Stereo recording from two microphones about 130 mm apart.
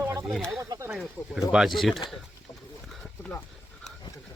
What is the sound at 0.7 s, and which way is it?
Snake, 20° right (ahead or behind).